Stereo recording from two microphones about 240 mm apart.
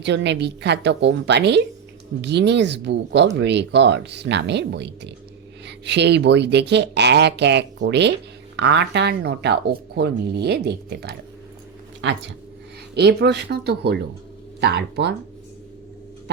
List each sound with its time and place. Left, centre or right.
0.0 s speech: right